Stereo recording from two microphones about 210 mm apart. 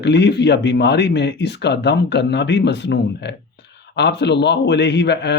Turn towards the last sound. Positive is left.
turn(degrees=55)  # may be behind; listen again after turning